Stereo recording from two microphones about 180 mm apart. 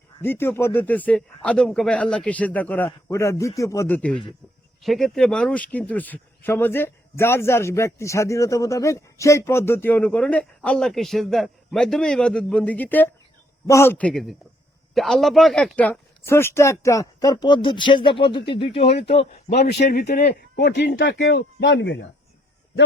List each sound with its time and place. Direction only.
0.2 s a man's voice: 15° left (ahead or behind); by 19.4 s 30° left (ahead or behind)
19.5 s speech: 65° left (ahead or behind); by 22.0 s 85° left